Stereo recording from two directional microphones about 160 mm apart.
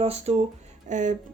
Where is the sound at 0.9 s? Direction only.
50° right (ahead or behind).